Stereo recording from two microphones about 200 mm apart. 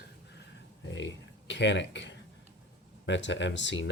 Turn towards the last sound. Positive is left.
turn(degrees=65)  # may be behind; listen again after turning